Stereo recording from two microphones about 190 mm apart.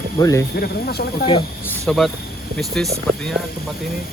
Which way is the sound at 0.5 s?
55° left (ahead or behind).